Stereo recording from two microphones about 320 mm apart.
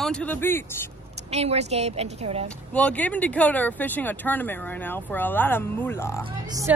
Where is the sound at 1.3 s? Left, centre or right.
Centre.